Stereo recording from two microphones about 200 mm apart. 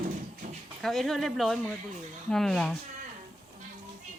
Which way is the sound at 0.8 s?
Centre (ahead or behind).